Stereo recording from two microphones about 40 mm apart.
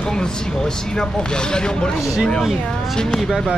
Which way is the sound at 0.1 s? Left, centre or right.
Centre.